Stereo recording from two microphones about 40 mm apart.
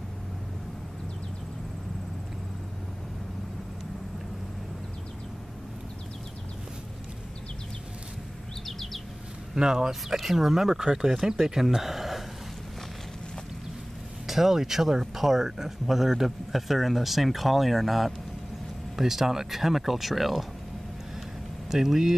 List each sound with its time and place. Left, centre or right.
8.6 s bird: centre
9.6 s speech: centre
9.8 s speech: centre
14.2 s speech: centre
21.6 s speech: centre